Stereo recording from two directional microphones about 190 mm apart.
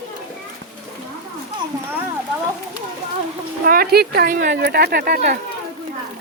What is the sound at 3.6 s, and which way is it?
Speech, 50° right (ahead or behind).